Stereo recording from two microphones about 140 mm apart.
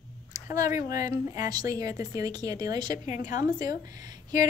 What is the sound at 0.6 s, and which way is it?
A woman's voice, 25° right (ahead or behind).